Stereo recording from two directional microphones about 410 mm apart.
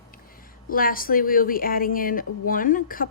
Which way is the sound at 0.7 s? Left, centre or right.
Left.